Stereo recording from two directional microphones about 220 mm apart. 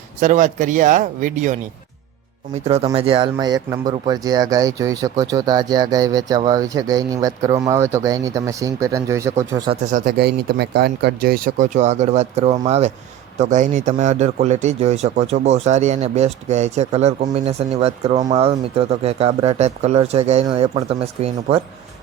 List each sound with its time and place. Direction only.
0.2 s speech: 35° right (ahead or behind)
2.6 s speech: 30° right (ahead or behind)
9.8 s a man's voice: 40° right (ahead or behind)